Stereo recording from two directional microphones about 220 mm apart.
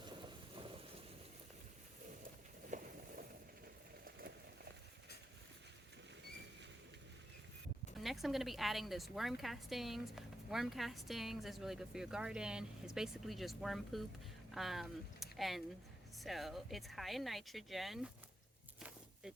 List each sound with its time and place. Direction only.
0.0 s rain: 20° right (ahead or behind)
2.6 s a sound: 35° right (ahead or behind)
8.0 s a woman's voice: centre (ahead or behind)